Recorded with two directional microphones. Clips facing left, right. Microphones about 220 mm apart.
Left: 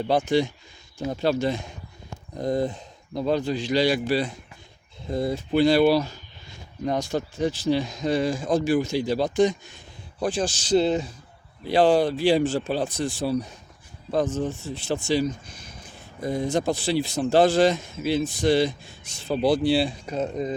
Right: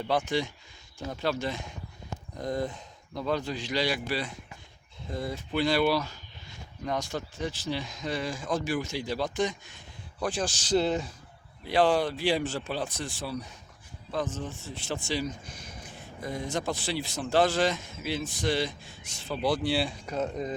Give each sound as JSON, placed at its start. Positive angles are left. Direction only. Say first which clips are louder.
{"t": 0.1, "sound": "speech", "louder": "left 6 dB", "side_deg": 35}
{"t": 7.1, "sound": "speech", "louder": "left 8 dB", "side_deg": 35}
{"t": 14.1, "sound": "speech", "louder": "left 8 dB", "side_deg": 40}